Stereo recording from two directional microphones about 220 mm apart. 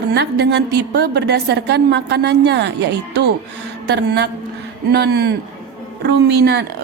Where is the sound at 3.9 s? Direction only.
50° right (ahead or behind).